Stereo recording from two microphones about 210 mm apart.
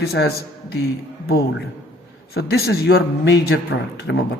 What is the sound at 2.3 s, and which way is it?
A man's voice, 50° left (ahead or behind).